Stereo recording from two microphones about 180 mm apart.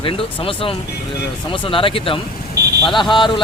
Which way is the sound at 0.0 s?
30° left (ahead or behind).